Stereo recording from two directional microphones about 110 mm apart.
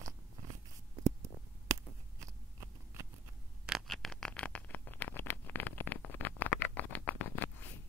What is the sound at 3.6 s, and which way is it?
Scratch, 5° right (ahead or behind).